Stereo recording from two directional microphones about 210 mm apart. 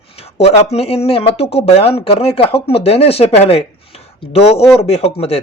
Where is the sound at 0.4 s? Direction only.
30° left (ahead or behind).